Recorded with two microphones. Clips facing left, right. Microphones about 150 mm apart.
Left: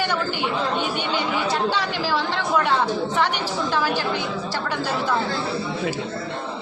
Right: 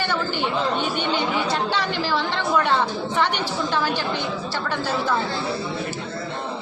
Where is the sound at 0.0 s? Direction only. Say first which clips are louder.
Even; 10° left (ahead or behind).